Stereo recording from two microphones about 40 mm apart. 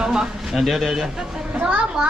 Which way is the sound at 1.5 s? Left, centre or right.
Right.